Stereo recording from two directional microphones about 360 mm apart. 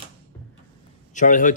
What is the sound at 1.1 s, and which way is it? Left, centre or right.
Speech, left.